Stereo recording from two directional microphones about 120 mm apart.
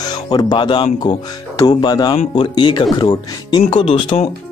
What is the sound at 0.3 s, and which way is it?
Speech, 40° left (ahead or behind).